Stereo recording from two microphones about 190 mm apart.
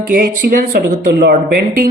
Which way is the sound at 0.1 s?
55° right (ahead or behind).